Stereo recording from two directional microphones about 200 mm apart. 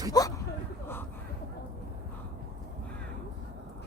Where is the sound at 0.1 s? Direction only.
20° left (ahead or behind).